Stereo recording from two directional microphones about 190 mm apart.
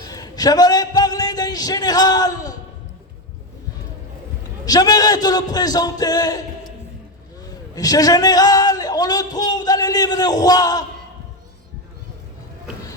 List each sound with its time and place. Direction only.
0.0 s a man's voice: 20° left (ahead or behind)
4.6 s a man's voice: 20° left (ahead or behind)
7.8 s a man's voice: 20° left (ahead or behind)